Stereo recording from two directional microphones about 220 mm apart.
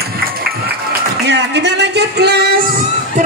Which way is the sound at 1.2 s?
50° right (ahead or behind).